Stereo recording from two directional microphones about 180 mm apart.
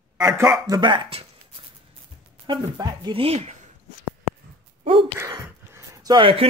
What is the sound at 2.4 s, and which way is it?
Speech, 25° right (ahead or behind).